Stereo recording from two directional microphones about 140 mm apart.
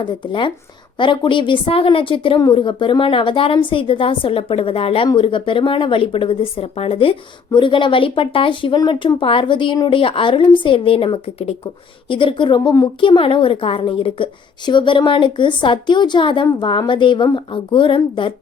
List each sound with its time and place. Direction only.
0.0 s speech: 35° left (ahead or behind)